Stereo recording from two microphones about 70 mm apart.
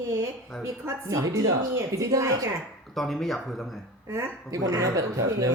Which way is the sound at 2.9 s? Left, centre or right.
Centre.